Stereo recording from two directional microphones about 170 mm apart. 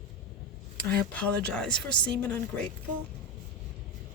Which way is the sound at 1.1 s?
5° left (ahead or behind).